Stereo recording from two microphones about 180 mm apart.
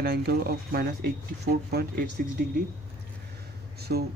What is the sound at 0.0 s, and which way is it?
Speech, 65° right (ahead or behind).